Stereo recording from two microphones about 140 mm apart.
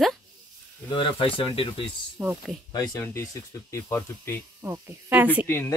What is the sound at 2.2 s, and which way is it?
Speech, 5° right (ahead or behind).